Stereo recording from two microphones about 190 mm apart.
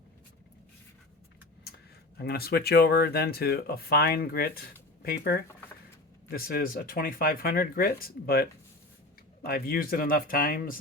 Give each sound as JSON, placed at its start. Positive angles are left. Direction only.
{"t": 2.1, "sound": "speech", "side_deg": 55}